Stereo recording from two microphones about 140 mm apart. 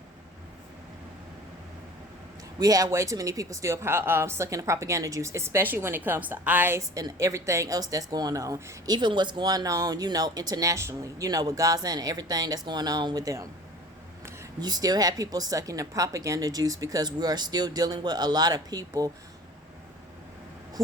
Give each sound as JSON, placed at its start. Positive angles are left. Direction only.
{"t": 2.6, "sound": "speech", "side_deg": -25}
{"t": 9.0, "sound": "speech", "side_deg": -35}
{"t": 14.6, "sound": "speech", "side_deg": -30}